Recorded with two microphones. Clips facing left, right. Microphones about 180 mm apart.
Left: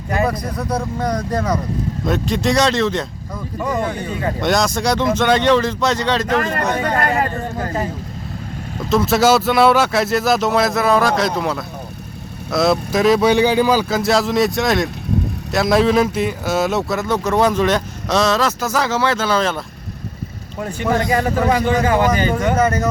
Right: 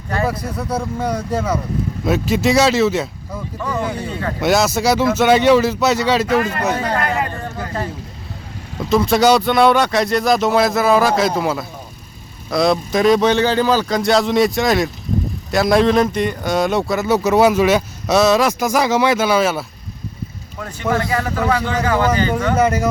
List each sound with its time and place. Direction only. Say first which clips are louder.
0.3 s speech: left 1 dB; 5° right (ahead or behind)
4.4 s speech: right 3 dB; 5° right (ahead or behind)
7.0 s a sound: left 2 dB; 40° left (ahead or behind)
8.9 s speech: right 1 dB; centre (ahead or behind)
20.6 s a man's voice: left 1 dB; 20° left (ahead or behind)
22.5 s speech: right 4 dB; 10° right (ahead or behind)